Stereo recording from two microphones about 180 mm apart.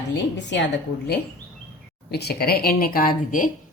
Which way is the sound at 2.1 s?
65° left (ahead or behind).